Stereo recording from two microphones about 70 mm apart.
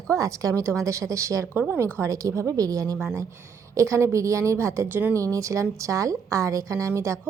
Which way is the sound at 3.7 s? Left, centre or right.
Right.